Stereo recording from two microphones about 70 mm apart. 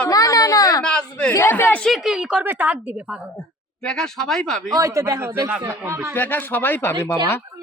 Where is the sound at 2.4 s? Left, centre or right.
Right.